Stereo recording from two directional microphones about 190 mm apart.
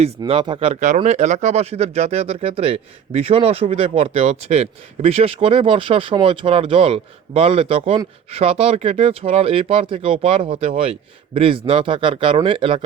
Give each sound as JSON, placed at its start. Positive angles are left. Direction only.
{"t": 0.2, "sound": "speech", "side_deg": -25}